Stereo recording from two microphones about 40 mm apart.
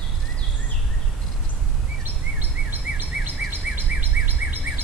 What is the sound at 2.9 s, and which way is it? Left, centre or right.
Bird vocalization, right.